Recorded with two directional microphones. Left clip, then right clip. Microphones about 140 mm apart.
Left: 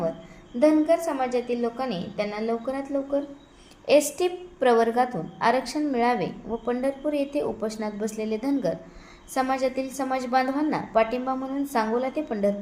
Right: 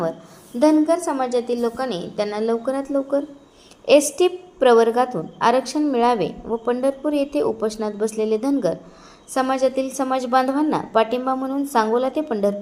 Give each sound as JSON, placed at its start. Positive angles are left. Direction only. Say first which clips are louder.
{"t": 0.6, "sound": "a woman's voice", "louder": "right 3 dB", "side_deg": -25}